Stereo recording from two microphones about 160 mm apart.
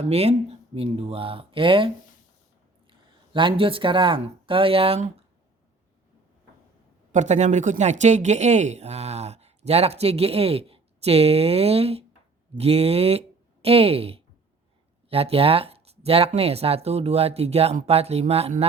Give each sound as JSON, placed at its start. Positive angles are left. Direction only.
{"t": 0.0, "sound": "speech", "side_deg": -40}
{"t": 3.3, "sound": "speech", "side_deg": -30}
{"t": 7.1, "sound": "speech", "side_deg": -45}